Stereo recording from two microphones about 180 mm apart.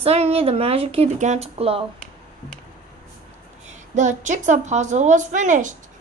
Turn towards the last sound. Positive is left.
turn(degrees=-45)  # may be behind; listen again after turning